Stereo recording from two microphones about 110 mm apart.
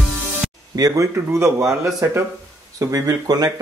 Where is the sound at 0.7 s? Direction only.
30° right (ahead or behind).